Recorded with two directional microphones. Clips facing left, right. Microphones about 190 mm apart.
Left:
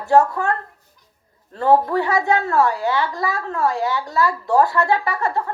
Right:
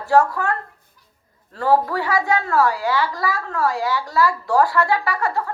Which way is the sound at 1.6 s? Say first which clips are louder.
Left 2 dB; 20° left (ahead or behind).